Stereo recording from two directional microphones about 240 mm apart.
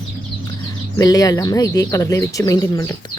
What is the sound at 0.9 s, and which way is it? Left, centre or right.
Speech, centre.